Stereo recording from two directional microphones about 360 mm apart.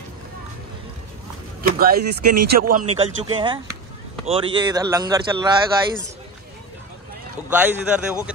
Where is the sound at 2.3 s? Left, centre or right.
Right.